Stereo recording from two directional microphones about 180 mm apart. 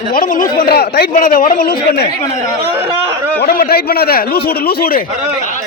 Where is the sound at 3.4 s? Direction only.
60° left (ahead or behind).